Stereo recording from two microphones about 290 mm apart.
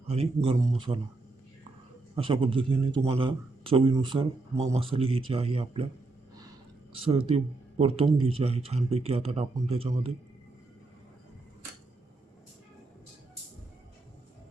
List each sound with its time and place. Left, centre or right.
0.1 s a man's voice: centre
2.1 s a man's voice: centre
7.0 s a man's voice: right